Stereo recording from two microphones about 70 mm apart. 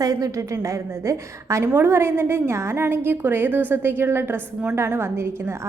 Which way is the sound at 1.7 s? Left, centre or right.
Right.